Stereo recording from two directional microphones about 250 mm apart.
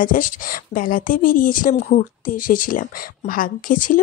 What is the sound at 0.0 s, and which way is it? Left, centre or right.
Speech, left.